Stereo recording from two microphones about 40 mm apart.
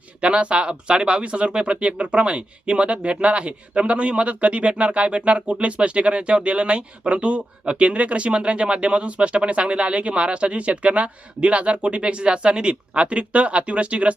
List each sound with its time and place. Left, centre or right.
0.2 s speech: right